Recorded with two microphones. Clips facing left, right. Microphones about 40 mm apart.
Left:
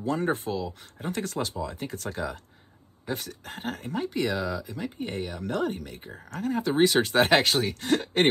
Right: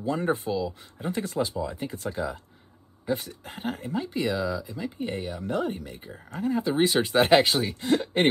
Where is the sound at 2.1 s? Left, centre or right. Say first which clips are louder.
Right 2 dB; left.